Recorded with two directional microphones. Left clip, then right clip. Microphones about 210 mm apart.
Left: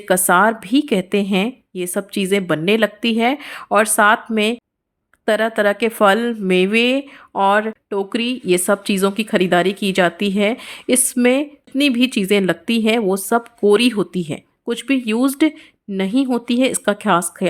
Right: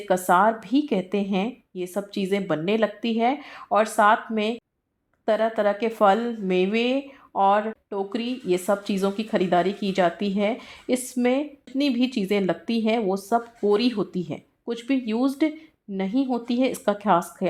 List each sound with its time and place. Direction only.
0.0 s speech: 30° left (ahead or behind)